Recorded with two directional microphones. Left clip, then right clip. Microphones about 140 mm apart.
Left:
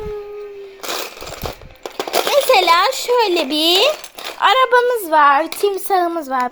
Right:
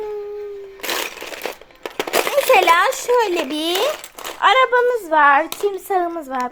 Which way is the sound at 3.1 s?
5° left (ahead or behind).